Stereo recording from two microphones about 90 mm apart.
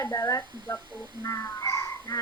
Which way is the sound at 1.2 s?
35° left (ahead or behind).